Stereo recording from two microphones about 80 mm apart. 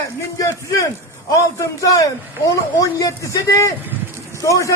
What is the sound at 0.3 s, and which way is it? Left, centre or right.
A man's voice, left.